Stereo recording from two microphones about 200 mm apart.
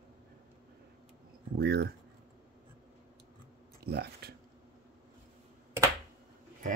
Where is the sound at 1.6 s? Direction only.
55° right (ahead or behind).